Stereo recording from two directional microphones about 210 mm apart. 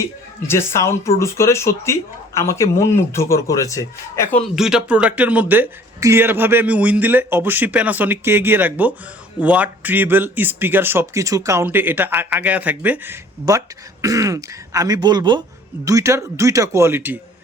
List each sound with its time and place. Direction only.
0.4 s speech: 10° left (ahead or behind)
4.5 s a man's voice: 5° right (ahead or behind)